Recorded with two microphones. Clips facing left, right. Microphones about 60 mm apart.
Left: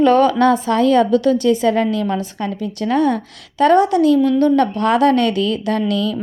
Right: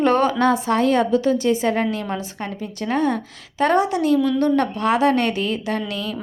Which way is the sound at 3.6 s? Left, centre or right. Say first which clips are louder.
Left 6 dB; left.